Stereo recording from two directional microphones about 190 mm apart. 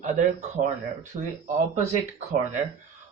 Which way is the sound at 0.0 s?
40° right (ahead or behind).